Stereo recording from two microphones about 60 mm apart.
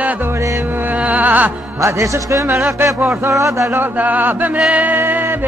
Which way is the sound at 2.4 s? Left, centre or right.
Right.